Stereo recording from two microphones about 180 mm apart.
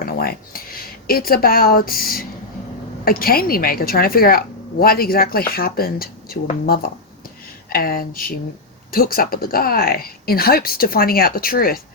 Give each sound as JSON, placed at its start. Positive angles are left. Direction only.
{"t": 0.0, "sound": "a woman's voice", "side_deg": 55}